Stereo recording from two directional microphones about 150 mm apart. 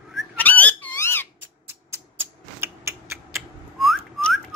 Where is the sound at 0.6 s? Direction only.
10° left (ahead or behind).